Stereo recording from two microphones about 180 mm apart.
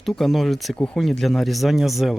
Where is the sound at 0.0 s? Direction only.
Centre (ahead or behind).